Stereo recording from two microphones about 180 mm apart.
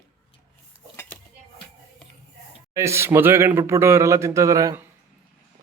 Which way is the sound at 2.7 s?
15° right (ahead or behind).